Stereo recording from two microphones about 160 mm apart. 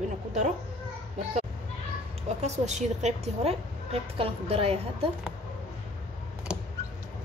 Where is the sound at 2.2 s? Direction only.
45° right (ahead or behind).